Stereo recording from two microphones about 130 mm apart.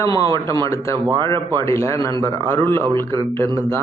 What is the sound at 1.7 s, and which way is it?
A man's voice, 20° left (ahead or behind).